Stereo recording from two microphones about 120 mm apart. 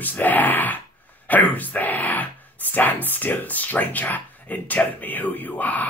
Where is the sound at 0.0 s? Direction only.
15° left (ahead or behind).